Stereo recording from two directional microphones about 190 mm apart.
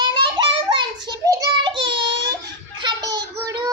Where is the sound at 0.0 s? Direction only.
25° right (ahead or behind).